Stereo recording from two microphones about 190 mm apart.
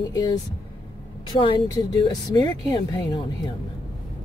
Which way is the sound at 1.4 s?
25° left (ahead or behind).